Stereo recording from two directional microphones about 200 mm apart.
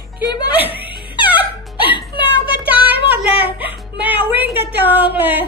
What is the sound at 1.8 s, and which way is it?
Whimper, 25° left (ahead or behind).